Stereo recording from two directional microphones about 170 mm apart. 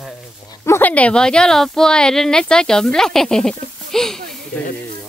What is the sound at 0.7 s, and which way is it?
Speech, 10° left (ahead or behind).